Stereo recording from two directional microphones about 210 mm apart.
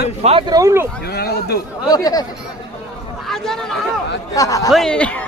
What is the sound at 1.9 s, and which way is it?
Speech, 20° left (ahead or behind).